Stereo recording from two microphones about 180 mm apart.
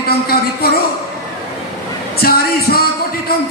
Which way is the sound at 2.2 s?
60° left (ahead or behind).